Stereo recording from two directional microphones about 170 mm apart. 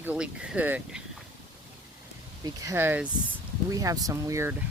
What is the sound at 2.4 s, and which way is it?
Speech, 20° right (ahead or behind).